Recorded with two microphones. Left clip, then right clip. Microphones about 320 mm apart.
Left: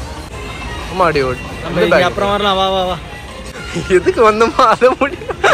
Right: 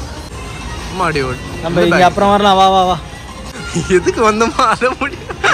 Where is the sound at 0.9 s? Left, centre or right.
Centre.